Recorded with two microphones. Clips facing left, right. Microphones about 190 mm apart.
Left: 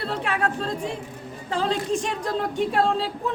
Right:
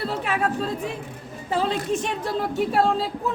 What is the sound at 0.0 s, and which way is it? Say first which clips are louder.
Speech: right 1 dB; 5° right (ahead or behind).